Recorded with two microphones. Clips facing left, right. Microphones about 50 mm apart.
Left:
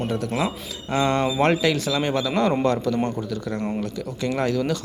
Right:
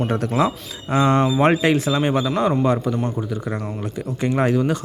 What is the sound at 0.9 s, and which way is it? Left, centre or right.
Speech, right.